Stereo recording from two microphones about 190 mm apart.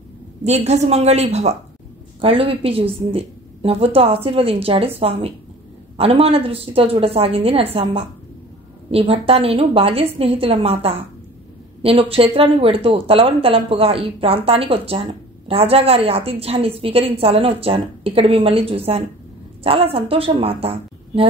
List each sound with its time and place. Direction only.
0.4 s a woman's voice: 35° right (ahead or behind)